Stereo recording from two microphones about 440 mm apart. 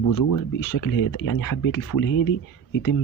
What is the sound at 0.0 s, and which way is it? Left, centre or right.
Speech, left.